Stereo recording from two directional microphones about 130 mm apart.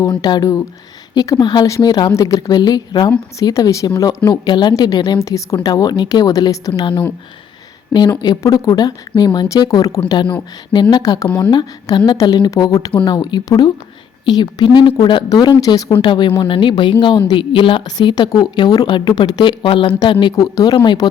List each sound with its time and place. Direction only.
0.0 s a woman's voice: 30° left (ahead or behind)
8.2 s a woman's voice: 30° left (ahead or behind)
16.0 s a woman's voice: 40° left (ahead or behind)
20.3 s speech: 25° left (ahead or behind)
20.7 s a woman's voice: 40° left (ahead or behind)